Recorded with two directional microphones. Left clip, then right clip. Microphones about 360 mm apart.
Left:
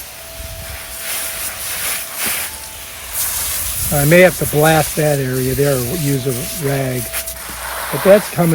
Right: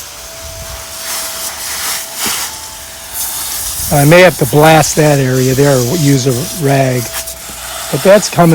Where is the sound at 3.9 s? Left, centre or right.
Centre.